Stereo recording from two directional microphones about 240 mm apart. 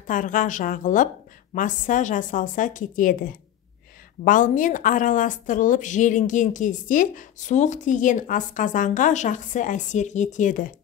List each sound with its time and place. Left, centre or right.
0.0 s a woman's voice: left